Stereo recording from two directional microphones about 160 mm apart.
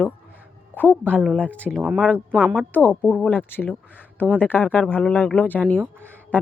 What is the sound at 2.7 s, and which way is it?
Speech, 10° left (ahead or behind).